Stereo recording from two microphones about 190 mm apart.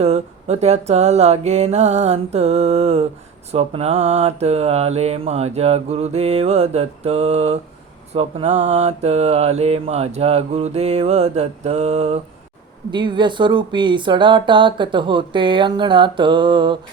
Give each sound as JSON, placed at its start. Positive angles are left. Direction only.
{"t": 0.0, "sound": "mantra", "side_deg": -35}
{"t": 12.9, "sound": "speech", "side_deg": -25}